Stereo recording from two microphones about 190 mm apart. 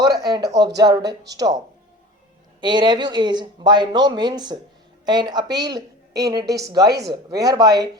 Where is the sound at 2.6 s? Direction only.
25° right (ahead or behind).